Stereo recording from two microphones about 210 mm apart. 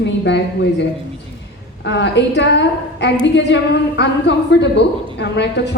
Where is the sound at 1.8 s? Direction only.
55° left (ahead or behind).